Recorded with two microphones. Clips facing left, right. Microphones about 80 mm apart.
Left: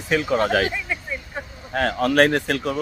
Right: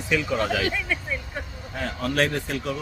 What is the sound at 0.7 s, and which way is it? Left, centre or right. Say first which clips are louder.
Speech: right 1 dB; centre.